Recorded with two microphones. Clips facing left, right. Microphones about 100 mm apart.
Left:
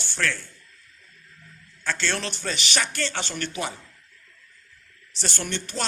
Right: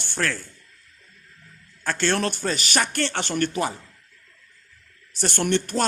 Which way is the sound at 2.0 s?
50° right (ahead or behind).